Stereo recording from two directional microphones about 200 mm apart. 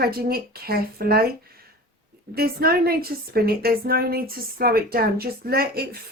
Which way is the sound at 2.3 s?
50° right (ahead or behind).